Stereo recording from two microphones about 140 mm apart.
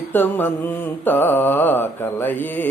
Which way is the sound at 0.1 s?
15° left (ahead or behind).